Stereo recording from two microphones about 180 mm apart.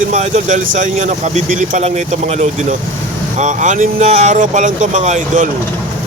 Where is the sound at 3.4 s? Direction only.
45° right (ahead or behind).